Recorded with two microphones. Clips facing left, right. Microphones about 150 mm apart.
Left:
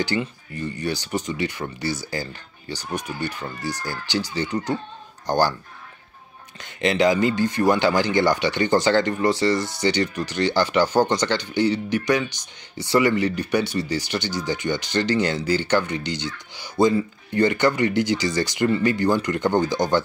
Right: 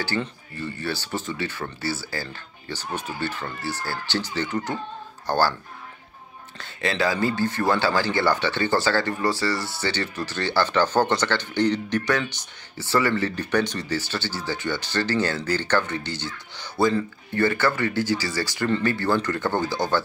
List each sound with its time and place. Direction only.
0.0 s speech: 20° left (ahead or behind)
6.6 s speech: 20° left (ahead or behind)